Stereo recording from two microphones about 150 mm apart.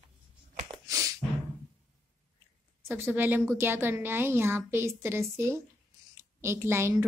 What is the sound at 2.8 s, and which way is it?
A woman's voice, 15° right (ahead or behind).